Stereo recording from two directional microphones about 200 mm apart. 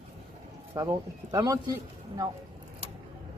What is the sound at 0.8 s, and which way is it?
Speech, 15° right (ahead or behind).